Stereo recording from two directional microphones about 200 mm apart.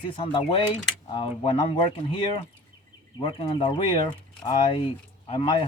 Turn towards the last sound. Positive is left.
turn(degrees=25)  # may be behind; listen again after turning